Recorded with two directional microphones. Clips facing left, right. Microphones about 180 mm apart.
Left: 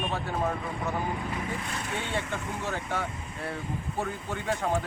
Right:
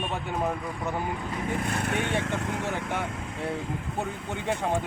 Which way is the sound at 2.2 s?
90° right.